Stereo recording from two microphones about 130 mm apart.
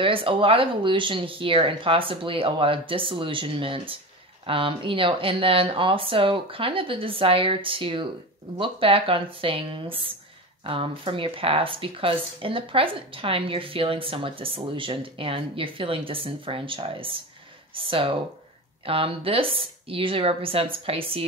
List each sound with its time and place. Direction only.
0.0 s speech: 45° right (ahead or behind)